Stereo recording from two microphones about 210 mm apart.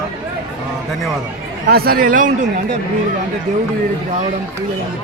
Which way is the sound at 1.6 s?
45° right (ahead or behind).